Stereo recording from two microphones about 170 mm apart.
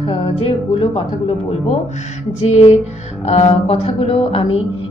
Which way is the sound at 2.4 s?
40° left (ahead or behind).